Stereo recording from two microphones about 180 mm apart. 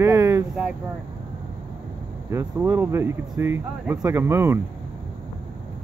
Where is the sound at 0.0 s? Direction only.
15° right (ahead or behind).